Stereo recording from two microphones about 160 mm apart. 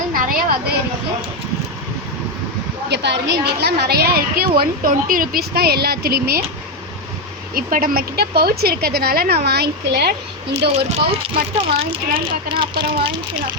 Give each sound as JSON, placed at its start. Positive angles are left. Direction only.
{"t": 0.1, "sound": "a sound", "side_deg": -60}
{"t": 2.9, "sound": "a woman's voice", "side_deg": -90}
{"t": 7.5, "sound": "a woman's voice", "side_deg": -65}
{"t": 10.8, "sound": "a woman's voice", "side_deg": -40}